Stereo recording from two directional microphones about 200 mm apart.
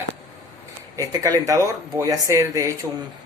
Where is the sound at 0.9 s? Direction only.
15° right (ahead or behind).